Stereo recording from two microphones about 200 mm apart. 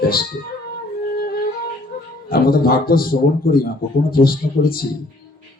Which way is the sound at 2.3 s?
50° left (ahead or behind).